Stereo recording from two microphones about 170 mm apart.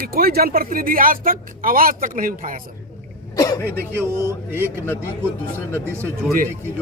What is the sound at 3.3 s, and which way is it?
Speech, 20° left (ahead or behind).